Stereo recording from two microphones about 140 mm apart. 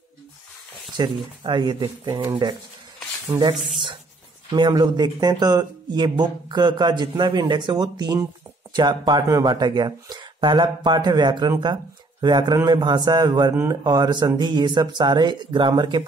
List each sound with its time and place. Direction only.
0.9 s speech: 30° right (ahead or behind)
4.5 s speech: 30° right (ahead or behind)